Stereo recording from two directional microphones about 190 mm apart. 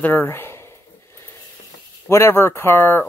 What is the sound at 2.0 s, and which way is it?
Speech, 15° left (ahead or behind).